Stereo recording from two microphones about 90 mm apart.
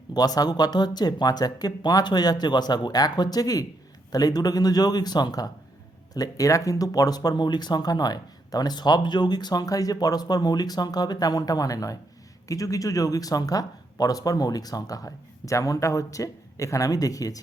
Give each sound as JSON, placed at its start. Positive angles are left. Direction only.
{"t": 0.1, "sound": "speech", "side_deg": 45}